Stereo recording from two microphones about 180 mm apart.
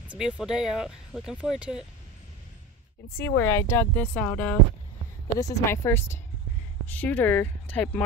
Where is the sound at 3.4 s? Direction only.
15° left (ahead or behind).